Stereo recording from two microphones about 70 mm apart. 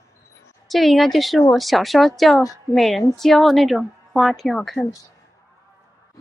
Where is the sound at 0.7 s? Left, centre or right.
Centre.